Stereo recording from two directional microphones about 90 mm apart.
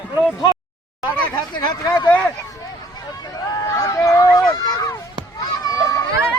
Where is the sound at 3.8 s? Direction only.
40° left (ahead or behind).